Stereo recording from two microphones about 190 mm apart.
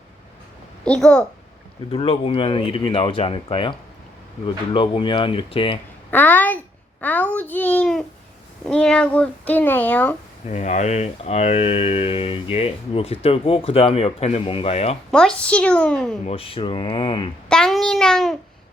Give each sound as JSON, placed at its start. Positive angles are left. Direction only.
{"t": 0.9, "sound": "a woman's voice", "side_deg": 5}
{"t": 1.9, "sound": "speech", "side_deg": 30}
{"t": 6.1, "sound": "a woman's voice", "side_deg": 10}
{"t": 7.0, "sound": "babbling", "side_deg": 10}
{"t": 8.6, "sound": "speech", "side_deg": 5}
{"t": 10.5, "sound": "speech", "side_deg": 35}
{"t": 15.1, "sound": "a woman's voice", "side_deg": 5}
{"t": 16.2, "sound": "speech", "side_deg": 30}
{"t": 17.5, "sound": "a child's voice", "side_deg": 0}